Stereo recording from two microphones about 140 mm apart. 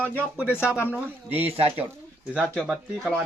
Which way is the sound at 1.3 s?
45° right (ahead or behind).